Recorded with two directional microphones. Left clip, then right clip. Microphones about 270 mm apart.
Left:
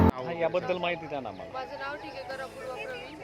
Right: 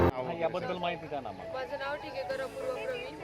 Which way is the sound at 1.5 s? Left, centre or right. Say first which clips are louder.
Right 2 dB; centre.